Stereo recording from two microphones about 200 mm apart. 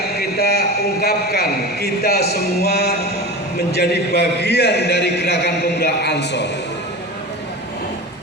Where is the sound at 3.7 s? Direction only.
55° left (ahead or behind).